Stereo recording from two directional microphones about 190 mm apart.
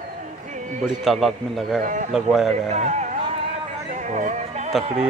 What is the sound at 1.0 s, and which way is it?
Speech, centre (ahead or behind).